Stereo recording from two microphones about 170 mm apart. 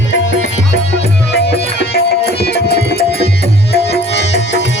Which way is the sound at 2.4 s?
70° left (ahead or behind).